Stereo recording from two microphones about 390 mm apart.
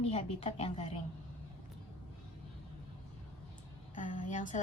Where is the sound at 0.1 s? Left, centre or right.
Centre.